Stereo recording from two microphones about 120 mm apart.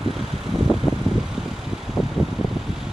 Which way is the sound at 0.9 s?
55° left (ahead or behind).